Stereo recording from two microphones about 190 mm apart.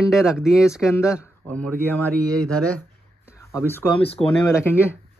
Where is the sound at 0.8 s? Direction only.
15° left (ahead or behind).